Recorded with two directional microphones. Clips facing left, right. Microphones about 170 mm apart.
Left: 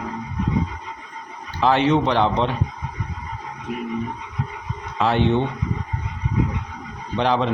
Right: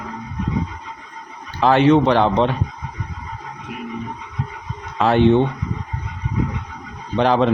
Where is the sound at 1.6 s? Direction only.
50° right (ahead or behind).